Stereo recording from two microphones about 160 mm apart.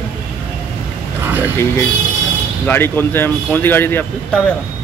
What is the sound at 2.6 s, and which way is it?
Speech, 10° left (ahead or behind).